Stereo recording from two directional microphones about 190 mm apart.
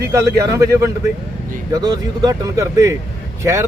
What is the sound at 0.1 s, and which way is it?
Speech, 15° right (ahead or behind).